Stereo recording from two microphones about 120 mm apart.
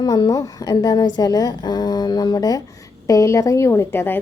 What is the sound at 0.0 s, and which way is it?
A woman's voice, 30° left (ahead or behind).